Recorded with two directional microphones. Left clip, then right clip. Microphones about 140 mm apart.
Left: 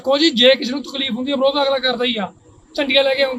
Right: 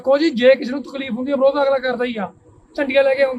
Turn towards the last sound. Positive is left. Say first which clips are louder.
# even
turn(degrees=0)  # may be behind; listen again after turning